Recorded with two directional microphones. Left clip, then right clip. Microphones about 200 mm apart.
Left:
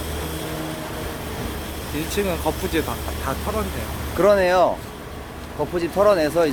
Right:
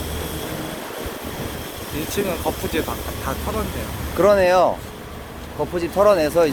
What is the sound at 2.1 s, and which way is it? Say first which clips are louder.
Speech: even; 30° left (ahead or behind).